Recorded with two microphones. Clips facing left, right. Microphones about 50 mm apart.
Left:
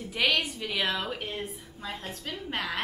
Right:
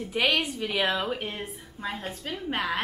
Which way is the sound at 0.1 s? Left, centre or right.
Centre.